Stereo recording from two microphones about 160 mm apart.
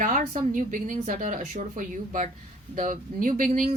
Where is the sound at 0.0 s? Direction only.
55° right (ahead or behind).